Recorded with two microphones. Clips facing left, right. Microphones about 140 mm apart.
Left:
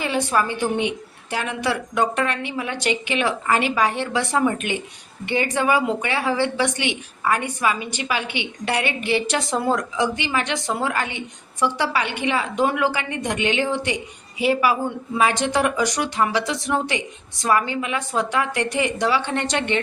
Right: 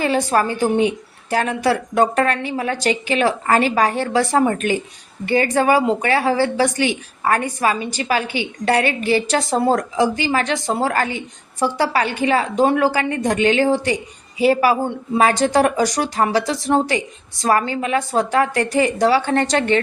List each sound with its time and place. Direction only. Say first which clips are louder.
0.0 s a woman's voice: right 4 dB; 40° right (ahead or behind)